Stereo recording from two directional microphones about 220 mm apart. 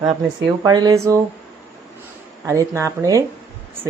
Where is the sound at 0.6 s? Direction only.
20° right (ahead or behind).